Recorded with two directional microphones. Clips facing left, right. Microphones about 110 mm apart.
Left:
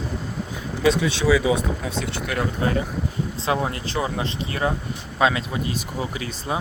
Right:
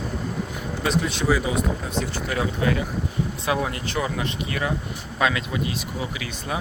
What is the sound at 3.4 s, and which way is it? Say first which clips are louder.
Speech: left 2 dB; 30° left (ahead or behind).